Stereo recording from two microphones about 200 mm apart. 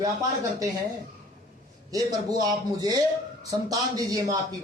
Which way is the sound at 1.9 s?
20° right (ahead or behind).